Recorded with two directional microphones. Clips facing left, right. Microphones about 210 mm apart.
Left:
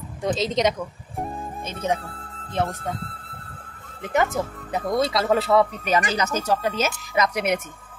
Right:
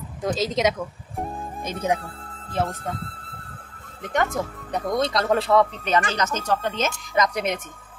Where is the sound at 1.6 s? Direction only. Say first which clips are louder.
Right 2 dB; 15° right (ahead or behind).